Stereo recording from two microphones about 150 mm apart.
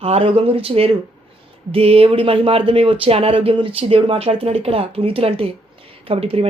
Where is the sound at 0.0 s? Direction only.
40° right (ahead or behind).